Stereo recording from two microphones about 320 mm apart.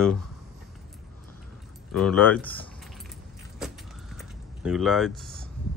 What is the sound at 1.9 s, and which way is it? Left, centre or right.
Speech, centre.